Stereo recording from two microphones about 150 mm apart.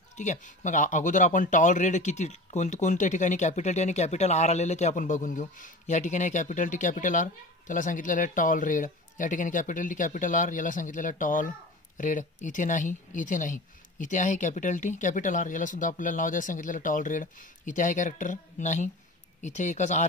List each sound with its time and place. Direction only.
0.2 s speech: 55° left (ahead or behind)